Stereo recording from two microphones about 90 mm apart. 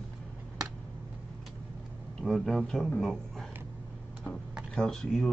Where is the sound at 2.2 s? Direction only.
Centre (ahead or behind).